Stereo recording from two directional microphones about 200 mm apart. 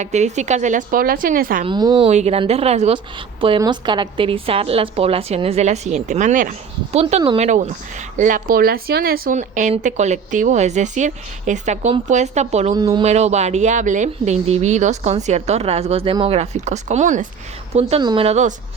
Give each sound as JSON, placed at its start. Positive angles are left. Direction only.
{"t": 0.0, "sound": "speech", "side_deg": -35}
{"t": 1.6, "sound": "a woman's voice", "side_deg": -20}
{"t": 2.0, "sound": "a woman's voice", "side_deg": -30}
{"t": 12.7, "sound": "a woman's voice", "side_deg": -20}
{"t": 13.0, "sound": "speech", "side_deg": -35}